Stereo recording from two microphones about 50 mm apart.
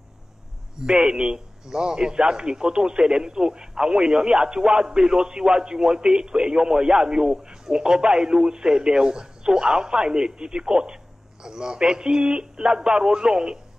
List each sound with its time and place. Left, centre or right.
0.7 s a man's voice: centre